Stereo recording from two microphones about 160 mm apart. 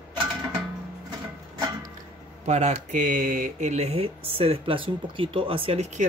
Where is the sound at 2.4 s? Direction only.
45° right (ahead or behind).